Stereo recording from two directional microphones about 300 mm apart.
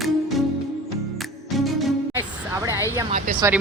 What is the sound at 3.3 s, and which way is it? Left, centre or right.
Speech, right.